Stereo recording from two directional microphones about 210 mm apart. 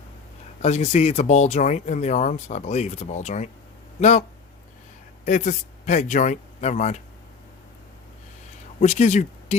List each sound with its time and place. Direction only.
0.6 s speech: 30° left (ahead or behind)
5.2 s speech: 35° left (ahead or behind)
8.8 s speech: 35° left (ahead or behind)